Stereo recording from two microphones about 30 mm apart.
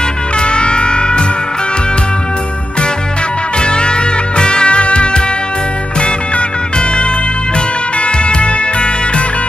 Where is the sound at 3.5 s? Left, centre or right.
Left.